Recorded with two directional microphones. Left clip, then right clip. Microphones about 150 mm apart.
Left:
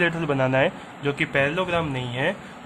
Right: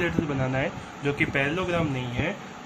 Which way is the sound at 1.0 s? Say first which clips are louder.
Left 3 dB; 25° left (ahead or behind).